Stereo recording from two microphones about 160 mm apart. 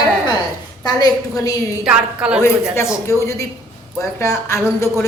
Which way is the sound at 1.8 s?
5° right (ahead or behind).